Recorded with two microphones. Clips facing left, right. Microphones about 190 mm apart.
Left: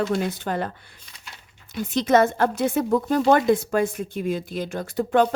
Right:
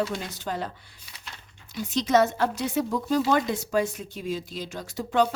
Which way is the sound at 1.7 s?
55° left (ahead or behind).